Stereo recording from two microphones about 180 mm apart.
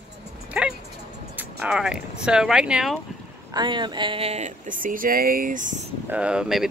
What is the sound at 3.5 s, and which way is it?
Speech, 25° right (ahead or behind).